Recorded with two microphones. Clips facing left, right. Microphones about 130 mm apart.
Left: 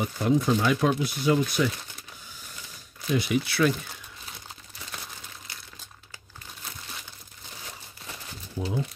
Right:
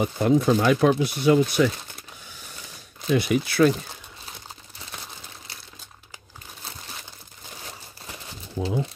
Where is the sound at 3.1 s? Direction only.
55° right (ahead or behind); by 3.9 s 35° right (ahead or behind).